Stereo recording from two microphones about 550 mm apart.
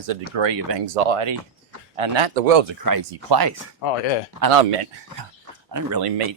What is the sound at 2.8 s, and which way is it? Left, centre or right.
Speech, right.